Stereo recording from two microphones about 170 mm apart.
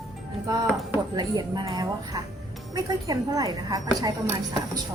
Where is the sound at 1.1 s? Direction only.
25° right (ahead or behind).